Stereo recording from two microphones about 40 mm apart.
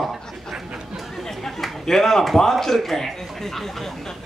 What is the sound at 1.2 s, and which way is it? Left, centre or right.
A man's voice, centre.